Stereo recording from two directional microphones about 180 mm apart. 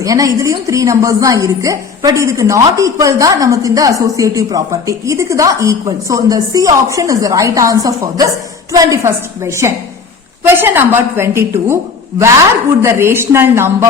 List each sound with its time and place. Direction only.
0.0 s a woman's voice: 20° right (ahead or behind)
12.8 s a woman's voice: 15° right (ahead or behind)